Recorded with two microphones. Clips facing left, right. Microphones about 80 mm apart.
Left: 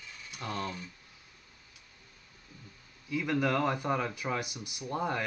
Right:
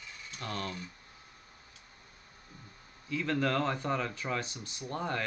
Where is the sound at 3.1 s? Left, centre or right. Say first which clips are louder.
Left 1 dB; centre.